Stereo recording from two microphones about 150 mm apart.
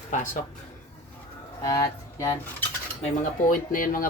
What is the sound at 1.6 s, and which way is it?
Speech, 25° left (ahead or behind).